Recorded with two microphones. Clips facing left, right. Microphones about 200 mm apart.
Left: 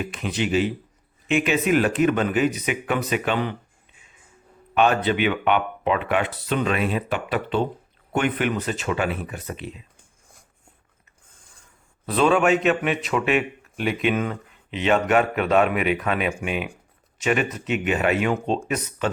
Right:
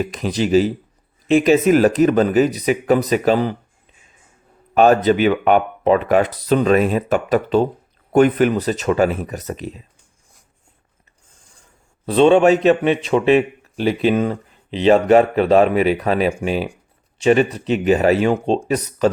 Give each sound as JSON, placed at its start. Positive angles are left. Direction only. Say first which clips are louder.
{"t": 0.0, "sound": "a man's voice", "louder": "right 6 dB", "side_deg": -40}
{"t": 4.7, "sound": "a man's voice", "louder": "right 7 dB", "side_deg": -40}
{"t": 12.0, "sound": "a man's voice", "louder": "right 7 dB", "side_deg": -30}